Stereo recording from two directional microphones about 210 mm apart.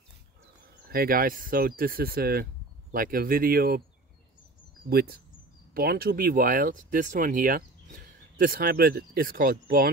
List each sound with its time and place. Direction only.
0.8 s speech: 45° right (ahead or behind)
4.8 s speech: 45° right (ahead or behind)